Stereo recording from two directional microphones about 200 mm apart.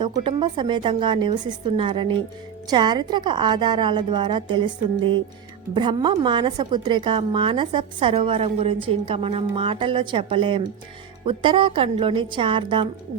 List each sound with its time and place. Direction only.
0.0 s a woman's voice: 25° right (ahead or behind)